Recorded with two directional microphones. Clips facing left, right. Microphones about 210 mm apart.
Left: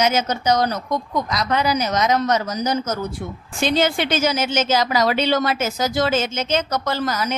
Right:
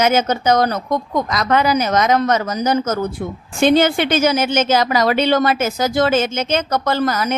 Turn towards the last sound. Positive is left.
turn(degrees=-55)  # may be behind; listen again after turning